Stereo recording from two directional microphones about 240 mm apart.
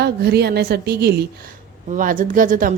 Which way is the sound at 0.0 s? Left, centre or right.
Right.